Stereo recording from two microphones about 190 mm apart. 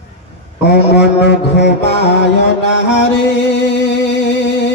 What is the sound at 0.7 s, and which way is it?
Mantra, 65° left (ahead or behind).